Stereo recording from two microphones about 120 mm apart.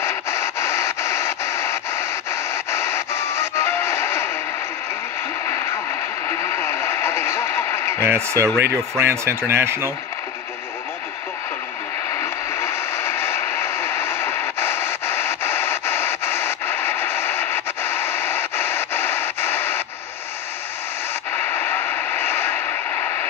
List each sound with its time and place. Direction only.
0.0 s radio: 20° left (ahead or behind)
6.2 s radio: 20° left (ahead or behind)
8.0 s speech: 25° right (ahead or behind)
12.2 s radio: 20° left (ahead or behind)
21.4 s a sound: 20° left (ahead or behind)